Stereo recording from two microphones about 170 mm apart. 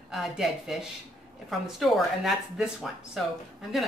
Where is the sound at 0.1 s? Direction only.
Centre (ahead or behind).